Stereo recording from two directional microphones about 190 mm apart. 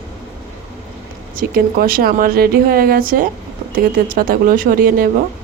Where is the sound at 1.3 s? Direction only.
50° right (ahead or behind).